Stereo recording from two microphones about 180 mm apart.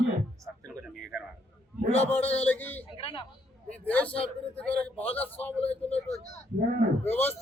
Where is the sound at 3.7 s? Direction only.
10° left (ahead or behind).